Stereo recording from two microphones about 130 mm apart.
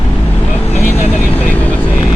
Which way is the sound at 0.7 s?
20° left (ahead or behind).